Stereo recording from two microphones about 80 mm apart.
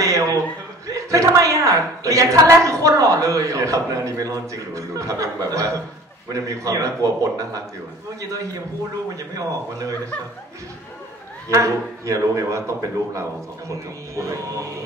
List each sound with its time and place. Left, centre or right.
0.0 s chuckle: right
0.8 s a woman's voice: right
9.3 s a woman's voice: right
11.4 s a man's voice: right